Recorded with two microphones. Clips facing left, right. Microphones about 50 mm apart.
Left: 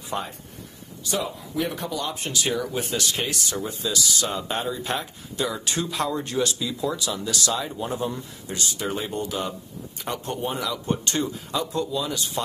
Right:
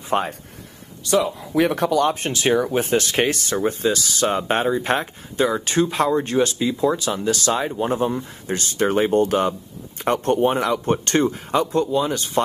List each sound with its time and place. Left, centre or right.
0.1 s a man's voice: right
1.0 s speech: right